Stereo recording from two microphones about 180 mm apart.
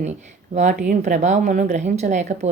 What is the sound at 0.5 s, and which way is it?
Speech, 40° right (ahead or behind).